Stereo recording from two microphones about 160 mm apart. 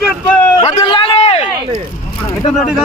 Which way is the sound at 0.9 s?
35° left (ahead or behind).